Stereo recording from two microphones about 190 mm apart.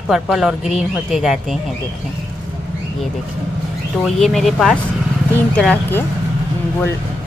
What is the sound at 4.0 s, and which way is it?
A woman's voice, centre (ahead or behind).